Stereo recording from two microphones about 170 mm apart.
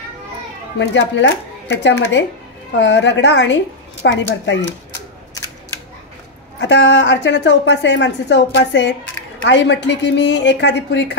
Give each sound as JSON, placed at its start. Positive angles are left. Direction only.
{"t": 0.7, "sound": "a woman's voice", "side_deg": 90}
{"t": 6.6, "sound": "a woman's voice", "side_deg": 90}